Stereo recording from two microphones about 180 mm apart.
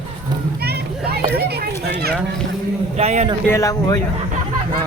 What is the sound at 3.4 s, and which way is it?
Speech, 15° left (ahead or behind).